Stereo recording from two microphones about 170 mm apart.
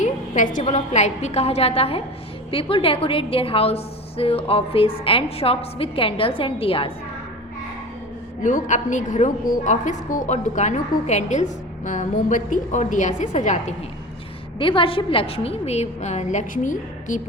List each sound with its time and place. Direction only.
0.0 s a woman's voice: 50° left (ahead or behind)
8.4 s a woman's voice: 45° left (ahead or behind)
14.6 s a woman's voice: 30° left (ahead or behind)